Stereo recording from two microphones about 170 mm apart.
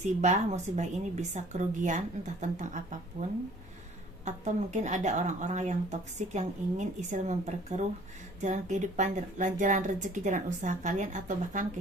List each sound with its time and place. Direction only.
0.0 s speech: 45° right (ahead or behind)
4.3 s speech: 45° right (ahead or behind)